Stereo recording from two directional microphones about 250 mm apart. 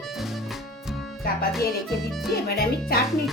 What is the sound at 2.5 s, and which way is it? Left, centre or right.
Speech, left.